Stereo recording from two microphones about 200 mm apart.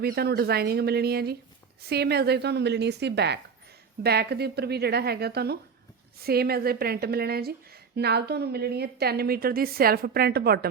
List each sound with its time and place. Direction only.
0.0 s a woman's voice: 50° right (ahead or behind)